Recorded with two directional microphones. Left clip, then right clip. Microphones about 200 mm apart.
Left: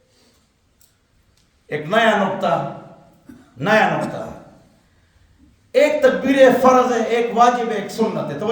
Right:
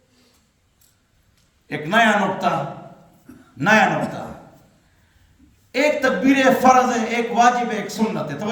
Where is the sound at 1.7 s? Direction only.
20° left (ahead or behind).